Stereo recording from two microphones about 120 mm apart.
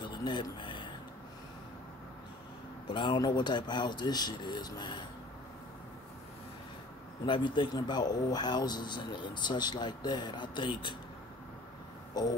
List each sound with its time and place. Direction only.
0.0 s a sound: 40° left (ahead or behind)
2.9 s speech: 40° left (ahead or behind)
7.2 s speech: 40° left (ahead or behind)
12.2 s speech: 35° left (ahead or behind)